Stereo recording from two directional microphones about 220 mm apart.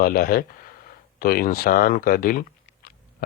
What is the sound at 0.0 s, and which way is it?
Speech, 40° left (ahead or behind).